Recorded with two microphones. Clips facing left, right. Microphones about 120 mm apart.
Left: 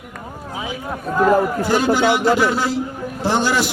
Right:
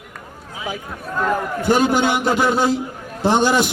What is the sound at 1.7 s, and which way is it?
A man's voice, 20° right (ahead or behind).